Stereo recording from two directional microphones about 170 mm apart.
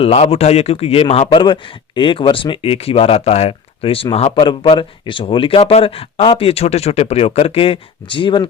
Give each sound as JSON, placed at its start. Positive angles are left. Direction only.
{"t": 0.0, "sound": "a man's voice", "side_deg": 35}